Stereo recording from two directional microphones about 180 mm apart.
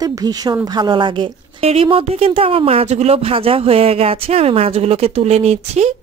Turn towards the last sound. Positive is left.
turn(degrees=-35)  # may be behind; listen again after turning